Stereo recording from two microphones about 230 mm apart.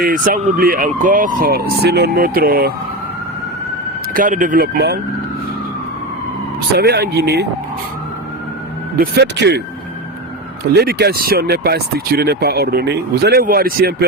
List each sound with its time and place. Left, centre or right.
0.0 s speech: right
4.1 s speech: right
6.7 s speech: right
9.0 s speech: right
10.8 s speech: right